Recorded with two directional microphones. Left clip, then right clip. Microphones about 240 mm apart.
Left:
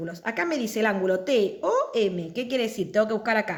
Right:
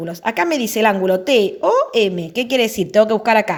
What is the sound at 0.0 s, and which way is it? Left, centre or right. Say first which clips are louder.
A woman's voice: right 9 dB; right.